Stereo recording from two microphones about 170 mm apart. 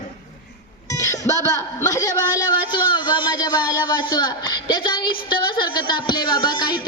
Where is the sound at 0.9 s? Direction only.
20° left (ahead or behind).